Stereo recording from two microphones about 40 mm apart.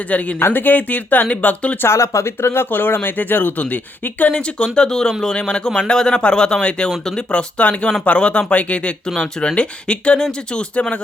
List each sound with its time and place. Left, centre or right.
0.1 s speech: left
0.3 s speech: left
1.8 s speech: left
3.6 s speech: left
4.3 s a man's voice: left
9.0 s speech: centre
9.6 s a man's voice: left